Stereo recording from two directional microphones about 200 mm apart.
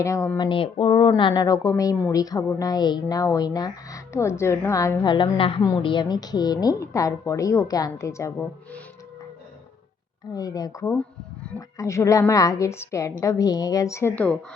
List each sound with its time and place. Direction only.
0.0 s speech: 15° left (ahead or behind)
0.4 s speech: 25° left (ahead or behind)
10.3 s speech: 20° left (ahead or behind)